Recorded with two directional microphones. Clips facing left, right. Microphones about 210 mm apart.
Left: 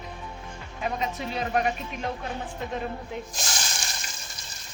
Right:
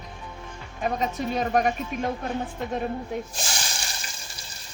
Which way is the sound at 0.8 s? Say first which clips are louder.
Right 3 dB; 45° right (ahead or behind).